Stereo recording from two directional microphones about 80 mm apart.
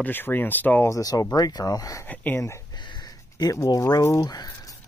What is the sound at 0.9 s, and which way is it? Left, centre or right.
Speech, left.